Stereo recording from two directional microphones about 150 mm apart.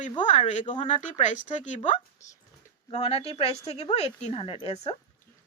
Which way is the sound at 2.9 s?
40° left (ahead or behind).